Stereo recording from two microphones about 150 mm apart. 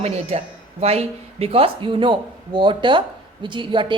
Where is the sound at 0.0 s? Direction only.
45° right (ahead or behind).